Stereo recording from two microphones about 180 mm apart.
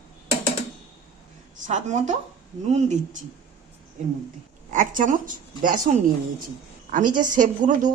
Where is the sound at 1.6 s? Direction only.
45° right (ahead or behind).